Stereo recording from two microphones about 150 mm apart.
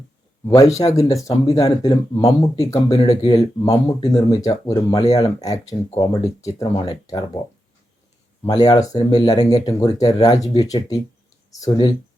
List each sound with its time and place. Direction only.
0.4 s speech: 20° left (ahead or behind)
8.4 s speech: 25° left (ahead or behind)